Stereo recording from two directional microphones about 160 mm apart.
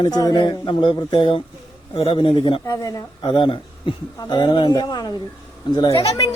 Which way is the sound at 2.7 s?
20° left (ahead or behind).